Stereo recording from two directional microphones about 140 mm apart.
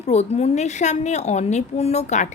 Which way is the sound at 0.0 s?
50° left (ahead or behind).